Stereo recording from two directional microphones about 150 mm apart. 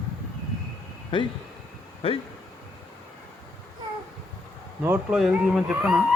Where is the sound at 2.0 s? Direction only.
40° left (ahead or behind).